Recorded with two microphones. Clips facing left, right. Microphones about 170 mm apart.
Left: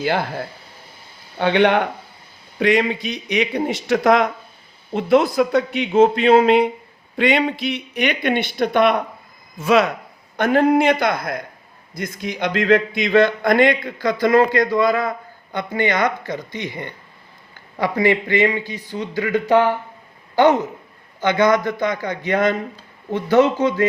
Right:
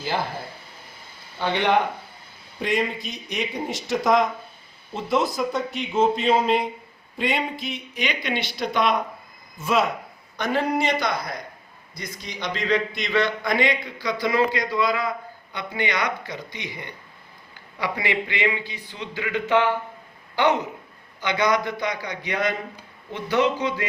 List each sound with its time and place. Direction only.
1.4 s speech: 65° left (ahead or behind)
9.6 s speech: 80° left
10.3 s speech: 55° left (ahead or behind)